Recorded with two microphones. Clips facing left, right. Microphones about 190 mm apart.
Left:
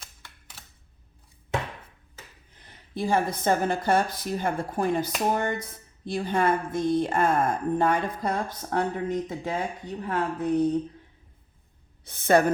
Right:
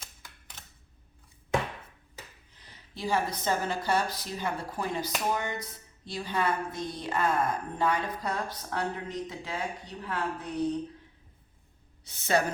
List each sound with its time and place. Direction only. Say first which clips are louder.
0.0 s typewriter: even; 5° left (ahead or behind)
2.6 s a woman's voice: left 8 dB; 50° left (ahead or behind)
12.0 s a woman's voice: left 7 dB; 55° left (ahead or behind)